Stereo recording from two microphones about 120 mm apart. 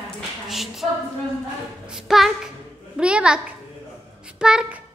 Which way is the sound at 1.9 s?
5° right (ahead or behind).